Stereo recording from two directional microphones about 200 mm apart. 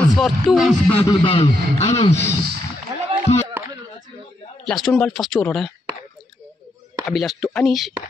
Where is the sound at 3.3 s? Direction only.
35° left (ahead or behind).